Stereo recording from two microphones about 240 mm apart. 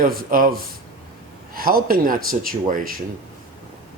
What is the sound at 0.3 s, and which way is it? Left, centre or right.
Speech, right.